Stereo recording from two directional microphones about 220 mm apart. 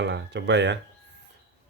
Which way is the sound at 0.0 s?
50° right (ahead or behind).